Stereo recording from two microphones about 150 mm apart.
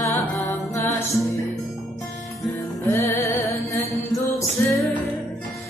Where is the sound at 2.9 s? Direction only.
20° left (ahead or behind).